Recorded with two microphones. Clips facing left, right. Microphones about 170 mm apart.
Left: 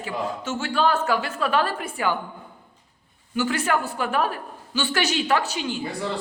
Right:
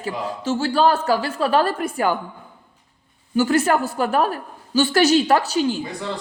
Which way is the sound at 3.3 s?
40° right (ahead or behind).